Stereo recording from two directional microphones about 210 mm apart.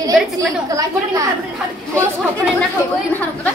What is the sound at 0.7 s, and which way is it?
Speech, 15° right (ahead or behind).